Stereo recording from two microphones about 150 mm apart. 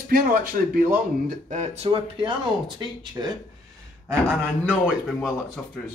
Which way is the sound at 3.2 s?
20° right (ahead or behind).